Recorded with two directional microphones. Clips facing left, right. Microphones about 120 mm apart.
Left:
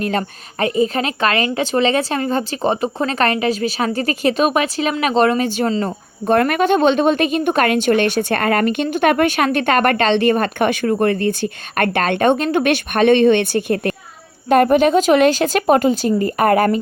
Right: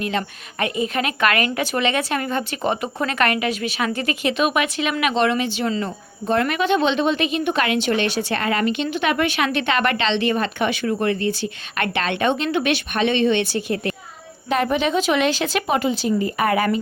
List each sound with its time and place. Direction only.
0.0 s speech: 40° left (ahead or behind)